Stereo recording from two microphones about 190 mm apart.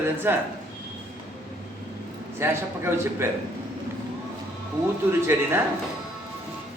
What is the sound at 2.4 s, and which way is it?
Speech, 10° right (ahead or behind).